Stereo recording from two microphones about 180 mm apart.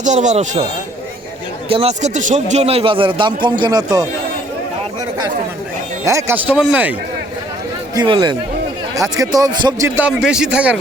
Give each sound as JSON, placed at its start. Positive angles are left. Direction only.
{"t": 0.0, "sound": "speech", "side_deg": -40}
{"t": 1.7, "sound": "a man's voice", "side_deg": -35}
{"t": 6.1, "sound": "speech", "side_deg": -15}
{"t": 7.9, "sound": "a man's voice", "side_deg": -25}
{"t": 10.1, "sound": "a man's voice", "side_deg": -5}